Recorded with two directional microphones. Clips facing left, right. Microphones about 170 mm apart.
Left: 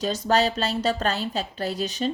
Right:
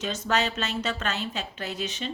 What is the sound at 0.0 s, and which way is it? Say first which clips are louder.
A woman's voice: left 5 dB; 35° left (ahead or behind).